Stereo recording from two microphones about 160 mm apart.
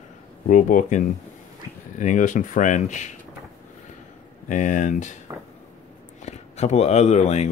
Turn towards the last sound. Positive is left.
turn(degrees=45)  # may be behind; listen again after turning